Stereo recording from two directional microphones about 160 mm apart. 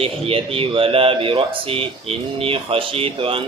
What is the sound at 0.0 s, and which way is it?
Speech, 35° right (ahead or behind).